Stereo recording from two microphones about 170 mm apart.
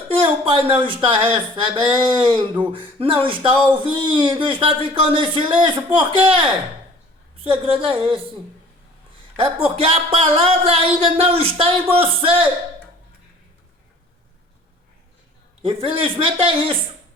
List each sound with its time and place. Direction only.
0.1 s speech: 30° right (ahead or behind)
9.4 s speech: 35° right (ahead or behind)
15.6 s speech: 30° right (ahead or behind)